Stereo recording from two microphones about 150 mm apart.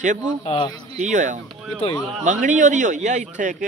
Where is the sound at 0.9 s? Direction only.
55° right (ahead or behind).